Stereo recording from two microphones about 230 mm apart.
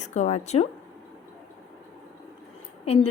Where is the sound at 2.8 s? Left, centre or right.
Left.